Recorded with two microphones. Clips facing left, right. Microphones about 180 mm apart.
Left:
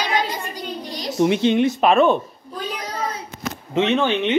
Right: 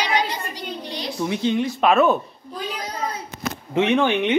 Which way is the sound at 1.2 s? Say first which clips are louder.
Left 4 dB; 70° left (ahead or behind).